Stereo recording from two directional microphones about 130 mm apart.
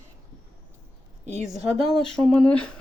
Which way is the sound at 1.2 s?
65° right (ahead or behind).